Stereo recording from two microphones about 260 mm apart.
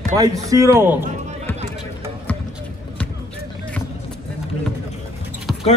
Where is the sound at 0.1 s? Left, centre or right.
Centre.